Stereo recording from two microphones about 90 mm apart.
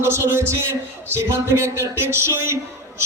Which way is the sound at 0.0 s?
30° right (ahead or behind).